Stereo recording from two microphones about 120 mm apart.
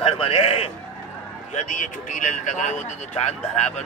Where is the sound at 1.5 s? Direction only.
85° left.